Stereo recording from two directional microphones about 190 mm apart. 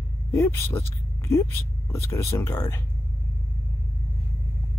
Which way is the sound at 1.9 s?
15° left (ahead or behind).